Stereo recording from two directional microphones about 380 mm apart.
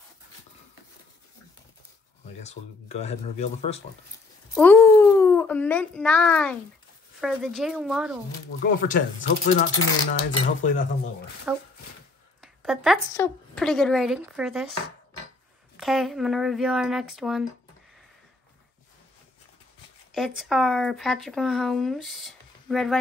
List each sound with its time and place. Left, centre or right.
2.4 s speech: centre
4.6 s a child's voice: centre
8.8 s speech: left
9.7 s speech: left
10.6 s speech: centre
11.5 s a woman's voice: centre
15.8 s speech: centre
20.2 s speech: centre